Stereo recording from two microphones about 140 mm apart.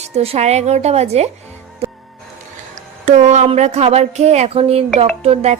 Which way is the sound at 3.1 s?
55° right (ahead or behind).